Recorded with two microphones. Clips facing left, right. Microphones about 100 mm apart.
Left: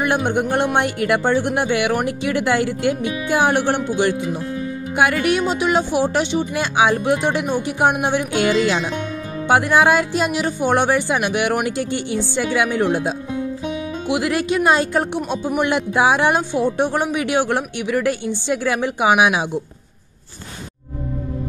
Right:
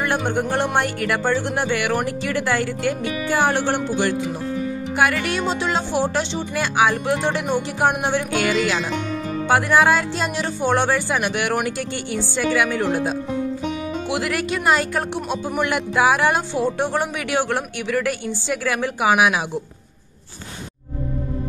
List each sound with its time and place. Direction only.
0.0 s speech: 20° left (ahead or behind)
9.5 s speech: 20° left (ahead or behind)